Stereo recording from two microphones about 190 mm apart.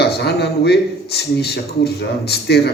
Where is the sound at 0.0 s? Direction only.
60° left (ahead or behind).